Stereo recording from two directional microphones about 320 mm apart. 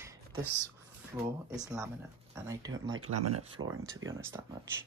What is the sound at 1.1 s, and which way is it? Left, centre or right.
Speech, centre.